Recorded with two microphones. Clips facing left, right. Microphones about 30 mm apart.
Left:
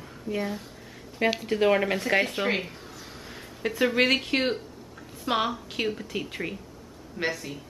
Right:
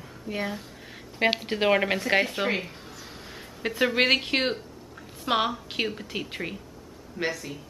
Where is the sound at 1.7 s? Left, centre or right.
Centre.